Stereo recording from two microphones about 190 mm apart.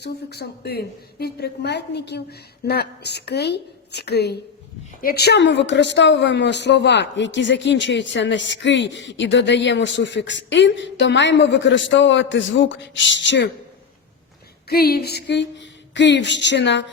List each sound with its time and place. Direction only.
0.0 s a woman's voice: 60° left (ahead or behind)
14.7 s a woman's voice: 55° left (ahead or behind)